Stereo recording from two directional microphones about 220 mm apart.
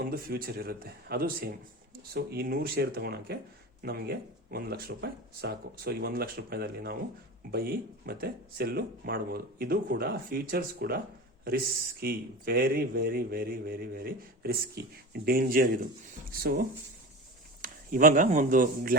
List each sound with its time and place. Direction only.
0.0 s speech: 40° right (ahead or behind)